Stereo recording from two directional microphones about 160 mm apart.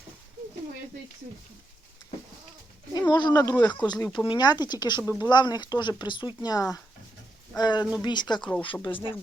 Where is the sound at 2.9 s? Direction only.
25° left (ahead or behind).